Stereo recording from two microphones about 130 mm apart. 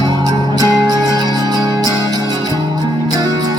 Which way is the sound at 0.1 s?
30° right (ahead or behind).